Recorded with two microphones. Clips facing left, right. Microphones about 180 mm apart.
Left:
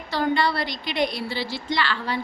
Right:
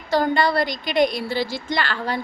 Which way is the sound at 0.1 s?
45° right (ahead or behind).